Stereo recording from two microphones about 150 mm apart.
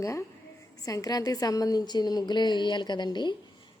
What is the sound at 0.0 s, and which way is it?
A woman's voice, 20° left (ahead or behind).